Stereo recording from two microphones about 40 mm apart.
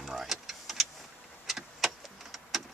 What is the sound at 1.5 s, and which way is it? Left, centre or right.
Vehicle, centre.